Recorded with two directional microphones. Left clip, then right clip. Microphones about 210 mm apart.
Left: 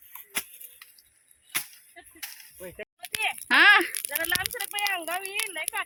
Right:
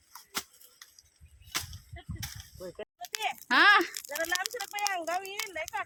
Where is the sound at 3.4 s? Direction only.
Centre (ahead or behind).